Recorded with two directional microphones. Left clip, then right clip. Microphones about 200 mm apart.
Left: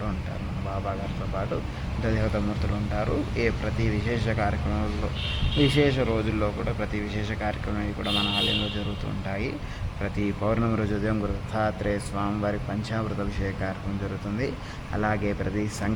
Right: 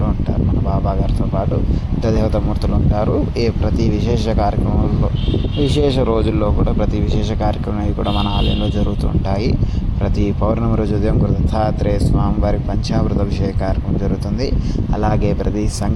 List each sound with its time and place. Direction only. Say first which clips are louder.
4.1 s speech: right 8 dB; 25° right (ahead or behind)
5.7 s speech: right 8 dB; 25° right (ahead or behind)
11.5 s speech: right 7 dB; 20° right (ahead or behind)
14.9 s speech: right 7 dB; 20° right (ahead or behind)